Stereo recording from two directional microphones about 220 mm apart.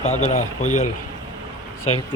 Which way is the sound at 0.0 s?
30° left (ahead or behind).